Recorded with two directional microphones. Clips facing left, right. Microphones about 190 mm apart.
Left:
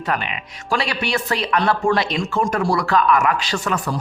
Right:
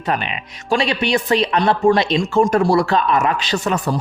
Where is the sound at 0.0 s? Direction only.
20° right (ahead or behind).